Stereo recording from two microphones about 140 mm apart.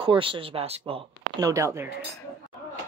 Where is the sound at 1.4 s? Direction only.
20° right (ahead or behind).